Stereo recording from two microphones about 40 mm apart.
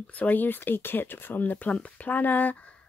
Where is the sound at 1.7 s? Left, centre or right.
Left.